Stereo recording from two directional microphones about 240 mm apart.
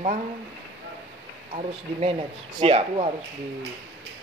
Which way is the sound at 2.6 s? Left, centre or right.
Right.